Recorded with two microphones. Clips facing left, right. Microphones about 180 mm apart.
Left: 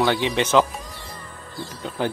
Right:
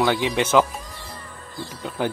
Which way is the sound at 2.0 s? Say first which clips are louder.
Even; 10° right (ahead or behind).